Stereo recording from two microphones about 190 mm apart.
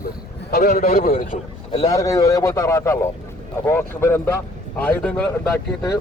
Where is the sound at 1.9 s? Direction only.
15° left (ahead or behind).